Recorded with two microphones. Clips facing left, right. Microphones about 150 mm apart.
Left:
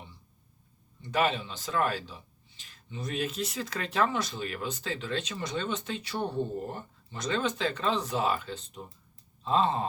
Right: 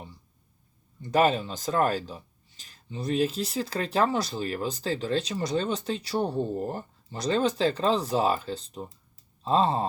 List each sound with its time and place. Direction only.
1.0 s speech: 40° right (ahead or behind)